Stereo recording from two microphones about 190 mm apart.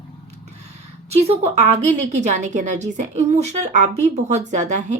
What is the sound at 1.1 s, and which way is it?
A woman's voice, 35° right (ahead or behind).